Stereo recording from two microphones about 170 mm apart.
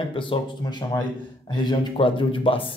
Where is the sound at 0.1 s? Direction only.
30° left (ahead or behind).